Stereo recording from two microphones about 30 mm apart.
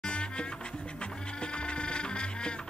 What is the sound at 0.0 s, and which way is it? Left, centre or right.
Music, left.